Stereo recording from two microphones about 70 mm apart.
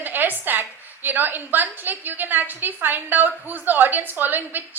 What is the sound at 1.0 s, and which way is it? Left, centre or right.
A woman's voice, right.